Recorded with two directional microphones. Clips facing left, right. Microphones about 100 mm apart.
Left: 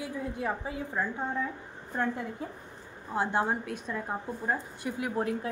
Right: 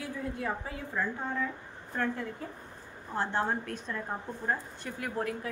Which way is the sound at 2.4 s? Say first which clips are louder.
Left 2 dB; 15° left (ahead or behind).